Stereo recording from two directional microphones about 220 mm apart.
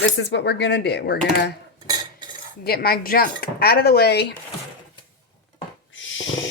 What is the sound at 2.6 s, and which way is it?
Speech, 45° left (ahead or behind).